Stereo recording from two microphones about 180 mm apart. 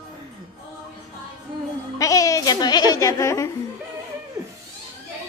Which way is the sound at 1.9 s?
20° left (ahead or behind).